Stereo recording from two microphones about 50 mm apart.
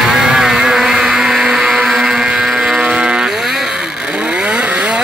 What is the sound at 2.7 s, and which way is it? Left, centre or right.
Vehicle, centre.